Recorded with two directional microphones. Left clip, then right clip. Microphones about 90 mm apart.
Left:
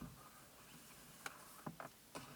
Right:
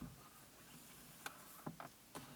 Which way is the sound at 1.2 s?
20° left (ahead or behind).